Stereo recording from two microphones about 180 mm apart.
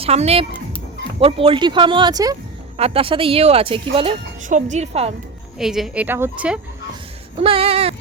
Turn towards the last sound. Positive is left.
turn(degrees=-35)  # may be behind; listen again after turning